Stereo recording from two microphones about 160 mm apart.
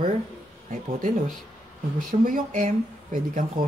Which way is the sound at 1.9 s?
55° right (ahead or behind).